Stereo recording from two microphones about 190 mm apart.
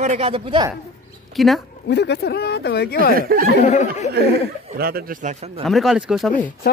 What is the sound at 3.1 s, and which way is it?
Speech, 50° right (ahead or behind).